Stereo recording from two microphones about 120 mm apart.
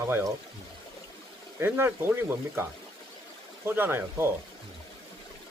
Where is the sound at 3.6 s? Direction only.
20° right (ahead or behind).